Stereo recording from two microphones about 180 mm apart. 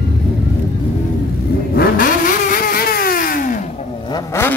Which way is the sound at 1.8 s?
50° left (ahead or behind).